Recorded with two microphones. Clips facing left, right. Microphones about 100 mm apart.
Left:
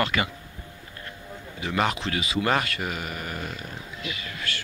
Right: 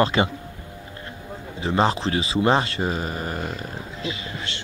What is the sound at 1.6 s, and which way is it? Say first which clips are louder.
Speech: right 5 dB; 30° right (ahead or behind).